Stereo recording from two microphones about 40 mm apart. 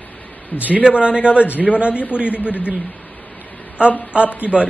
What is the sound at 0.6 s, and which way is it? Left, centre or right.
Speech, right.